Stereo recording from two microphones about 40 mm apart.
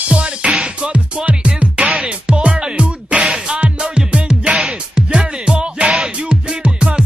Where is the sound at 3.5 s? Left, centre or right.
Right.